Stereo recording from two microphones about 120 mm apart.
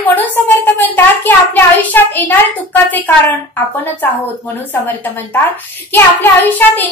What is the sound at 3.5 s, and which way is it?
A woman's voice, 15° left (ahead or behind).